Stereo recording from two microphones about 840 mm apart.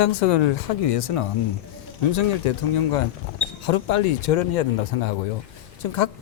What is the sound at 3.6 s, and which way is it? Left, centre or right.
A man's voice, left.